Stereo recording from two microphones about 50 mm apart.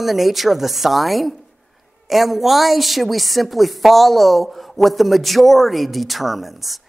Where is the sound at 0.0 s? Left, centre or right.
Centre.